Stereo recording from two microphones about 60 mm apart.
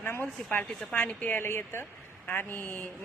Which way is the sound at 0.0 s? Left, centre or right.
Left.